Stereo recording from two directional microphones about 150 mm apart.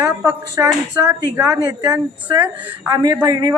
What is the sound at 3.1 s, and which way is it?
Speech, 20° right (ahead or behind).